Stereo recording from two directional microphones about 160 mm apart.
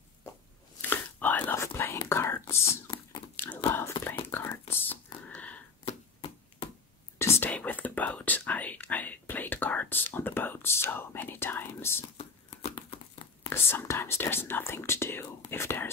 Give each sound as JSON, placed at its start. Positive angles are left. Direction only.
{"t": 0.8, "sound": "whispering", "side_deg": 10}
{"t": 5.9, "sound": "chop", "side_deg": 30}
{"t": 7.3, "sound": "whispering", "side_deg": 10}
{"t": 12.2, "sound": "a sound", "side_deg": 30}
{"t": 13.5, "sound": "whispering", "side_deg": 15}